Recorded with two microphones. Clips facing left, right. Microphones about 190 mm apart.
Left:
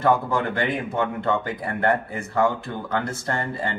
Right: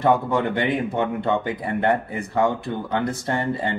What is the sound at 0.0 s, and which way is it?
Speech, 20° right (ahead or behind).